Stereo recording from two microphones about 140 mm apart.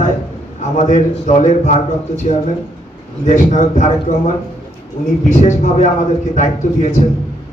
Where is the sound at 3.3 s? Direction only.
60° left (ahead or behind).